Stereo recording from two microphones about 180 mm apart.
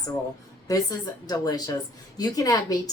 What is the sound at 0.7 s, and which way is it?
Speech, 20° left (ahead or behind).